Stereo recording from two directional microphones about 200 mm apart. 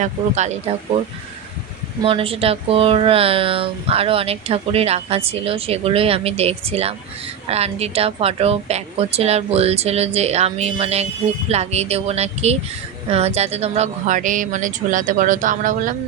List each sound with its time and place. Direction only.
0.0 s a woman's voice: 35° right (ahead or behind)